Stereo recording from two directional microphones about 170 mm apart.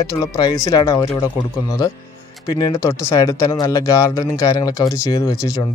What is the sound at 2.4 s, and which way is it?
Speech, 20° left (ahead or behind).